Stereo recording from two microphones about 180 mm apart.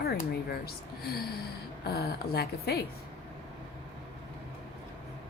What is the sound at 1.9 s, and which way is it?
Speech, 60° left (ahead or behind).